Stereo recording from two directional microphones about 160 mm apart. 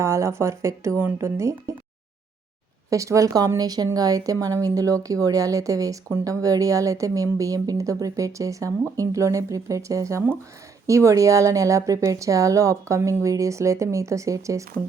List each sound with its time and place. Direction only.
0.0 s speech: 15° right (ahead or behind)
2.9 s a woman's voice: 20° right (ahead or behind)